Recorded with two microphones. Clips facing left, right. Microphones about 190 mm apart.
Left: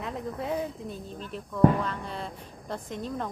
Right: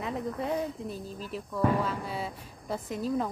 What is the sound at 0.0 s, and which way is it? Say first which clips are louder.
Speech: right 1 dB; centre (ahead or behind).